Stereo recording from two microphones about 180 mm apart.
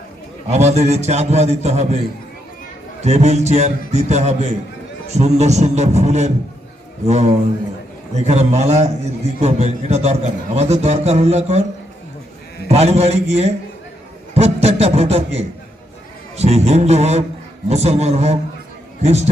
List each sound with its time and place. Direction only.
0.5 s a man's voice: 35° right (ahead or behind)
3.0 s a man's voice: 35° right (ahead or behind)
12.6 s a man's voice: 35° right (ahead or behind)